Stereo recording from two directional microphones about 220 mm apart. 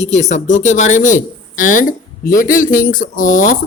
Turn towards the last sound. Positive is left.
turn(degrees=35)  # may be behind; listen again after turning